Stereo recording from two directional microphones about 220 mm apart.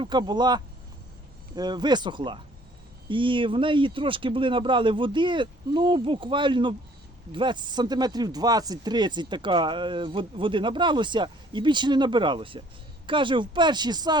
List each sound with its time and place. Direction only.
0.0 s speech: 20° right (ahead or behind)